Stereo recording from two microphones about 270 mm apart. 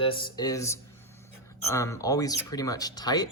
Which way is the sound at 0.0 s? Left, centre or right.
Centre.